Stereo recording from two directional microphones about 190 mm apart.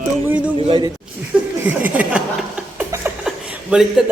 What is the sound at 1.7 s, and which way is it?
Chuckle, 10° right (ahead or behind).